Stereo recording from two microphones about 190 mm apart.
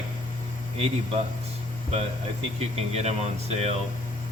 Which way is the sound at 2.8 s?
35° right (ahead or behind).